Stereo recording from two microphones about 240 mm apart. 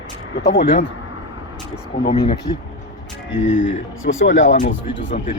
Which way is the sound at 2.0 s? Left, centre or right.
Left.